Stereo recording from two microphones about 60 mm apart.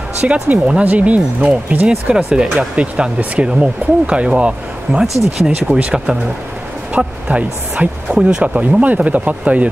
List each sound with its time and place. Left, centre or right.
0.2 s speech: right
5.0 s speech: centre
7.0 s speech: centre
8.8 s speech: right